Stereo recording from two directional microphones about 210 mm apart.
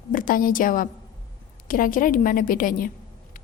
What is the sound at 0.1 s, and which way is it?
A woman's voice, 40° left (ahead or behind).